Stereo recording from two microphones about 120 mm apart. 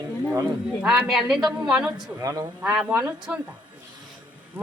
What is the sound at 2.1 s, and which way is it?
Speech, 30° right (ahead or behind).